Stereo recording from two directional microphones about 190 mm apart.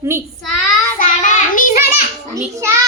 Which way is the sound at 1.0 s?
45° left (ahead or behind).